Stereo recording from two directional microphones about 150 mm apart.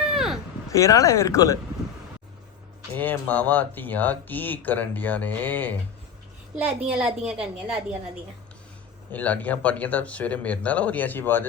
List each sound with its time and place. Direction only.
0.0 s a sound: 5° right (ahead or behind)
0.7 s speech: 20° left (ahead or behind)
2.9 s speech: 10° left (ahead or behind)
6.7 s a woman's voice: 10° right (ahead or behind)
9.1 s speech: 10° left (ahead or behind)